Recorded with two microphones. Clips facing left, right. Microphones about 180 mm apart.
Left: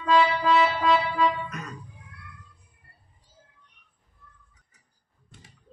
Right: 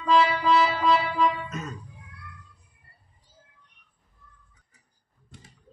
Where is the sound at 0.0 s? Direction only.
Centre (ahead or behind).